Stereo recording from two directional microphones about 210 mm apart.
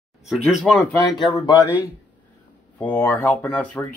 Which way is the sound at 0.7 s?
Centre (ahead or behind).